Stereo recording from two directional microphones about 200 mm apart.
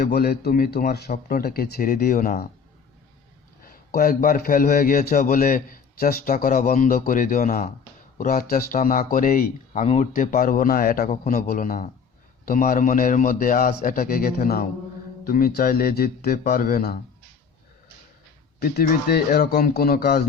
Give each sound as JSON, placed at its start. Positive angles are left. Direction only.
{"t": 0.0, "sound": "a man's voice", "side_deg": 50}
{"t": 3.7, "sound": "a man's voice", "side_deg": 45}
{"t": 18.6, "sound": "a man's voice", "side_deg": 50}